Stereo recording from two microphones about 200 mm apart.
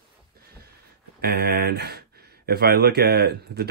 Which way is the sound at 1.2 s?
50° right (ahead or behind).